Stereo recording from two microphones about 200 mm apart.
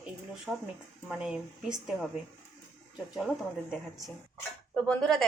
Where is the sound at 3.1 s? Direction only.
Centre (ahead or behind).